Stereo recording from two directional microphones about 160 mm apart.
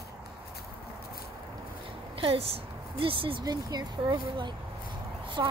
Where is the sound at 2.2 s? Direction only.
35° right (ahead or behind).